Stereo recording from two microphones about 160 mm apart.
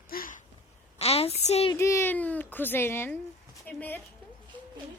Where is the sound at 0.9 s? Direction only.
40° left (ahead or behind).